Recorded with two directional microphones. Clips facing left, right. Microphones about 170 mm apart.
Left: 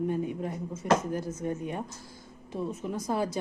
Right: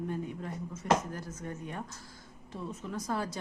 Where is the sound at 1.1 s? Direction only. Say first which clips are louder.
Left 9 dB; 20° left (ahead or behind).